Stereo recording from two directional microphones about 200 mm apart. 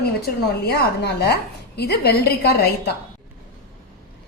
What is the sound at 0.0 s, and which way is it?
A woman's voice, 55° left (ahead or behind).